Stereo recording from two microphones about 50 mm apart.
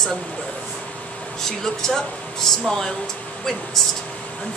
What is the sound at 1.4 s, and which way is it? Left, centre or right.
Speech, centre.